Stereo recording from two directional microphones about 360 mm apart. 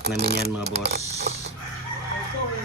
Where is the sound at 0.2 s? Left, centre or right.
Right.